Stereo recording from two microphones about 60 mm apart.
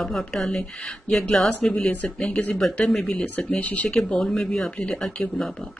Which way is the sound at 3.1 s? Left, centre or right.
Left.